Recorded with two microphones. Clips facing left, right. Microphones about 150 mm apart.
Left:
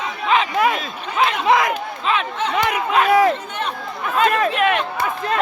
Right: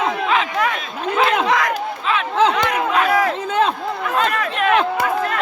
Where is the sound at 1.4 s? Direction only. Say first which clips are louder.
Left 2 dB; 20° left (ahead or behind).